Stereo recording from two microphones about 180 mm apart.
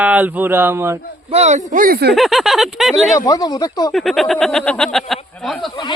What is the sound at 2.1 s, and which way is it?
Speech, centre (ahead or behind).